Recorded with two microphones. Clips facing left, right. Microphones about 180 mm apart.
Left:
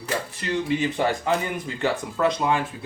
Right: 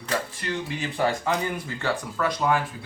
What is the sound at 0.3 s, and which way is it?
Speech, 20° left (ahead or behind).